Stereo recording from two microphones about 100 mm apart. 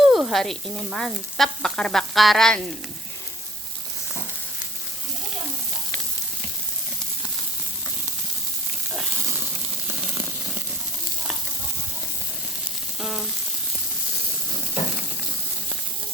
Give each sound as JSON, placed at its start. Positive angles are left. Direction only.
{"t": 0.0, "sound": "frying", "side_deg": -5}
{"t": 9.3, "sound": "a sound", "side_deg": -25}
{"t": 13.0, "sound": "frying", "side_deg": -5}